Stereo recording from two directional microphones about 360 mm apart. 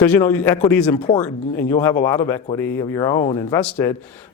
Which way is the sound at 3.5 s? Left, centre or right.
Centre.